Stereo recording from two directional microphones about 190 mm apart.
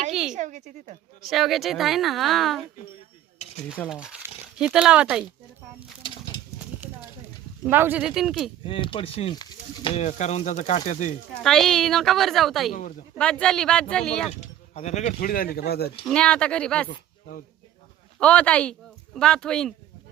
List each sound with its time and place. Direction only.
0.1 s a sound: 5° right (ahead or behind)
0.3 s a woman's voice: 40° right (ahead or behind)
1.3 s a woman's voice: centre (ahead or behind)
3.3 s dishes: 35° left (ahead or behind)
4.0 s speech: 5° right (ahead or behind)
6.0 s a sound: 25° left (ahead or behind)
7.6 s a woman's voice: 10° right (ahead or behind)
8.6 s speech: 25° left (ahead or behind)
9.9 s speech: 40° left (ahead or behind)
11.4 s a woman's voice: centre (ahead or behind)
14.8 s speech: 40° left (ahead or behind); by 15.9 s 55° left (ahead or behind)
16.0 s a woman's voice: 5° left (ahead or behind)
18.2 s speech: 5° left (ahead or behind)